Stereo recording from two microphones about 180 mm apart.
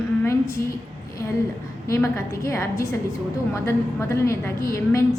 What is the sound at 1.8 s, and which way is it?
A woman's voice, 15° left (ahead or behind).